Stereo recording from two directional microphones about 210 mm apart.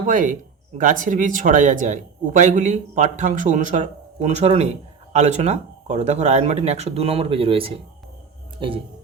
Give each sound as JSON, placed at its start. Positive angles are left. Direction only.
{"t": 0.0, "sound": "speech", "side_deg": -40}